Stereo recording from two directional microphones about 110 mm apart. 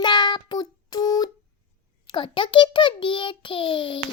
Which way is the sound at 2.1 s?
50° left (ahead or behind).